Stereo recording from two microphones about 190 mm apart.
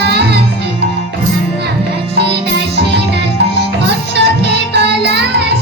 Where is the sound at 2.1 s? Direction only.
60° right (ahead or behind).